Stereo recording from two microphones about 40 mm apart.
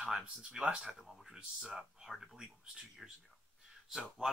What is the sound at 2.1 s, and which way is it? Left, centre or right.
Speech, centre.